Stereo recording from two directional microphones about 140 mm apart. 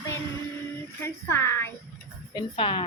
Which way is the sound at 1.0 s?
15° left (ahead or behind).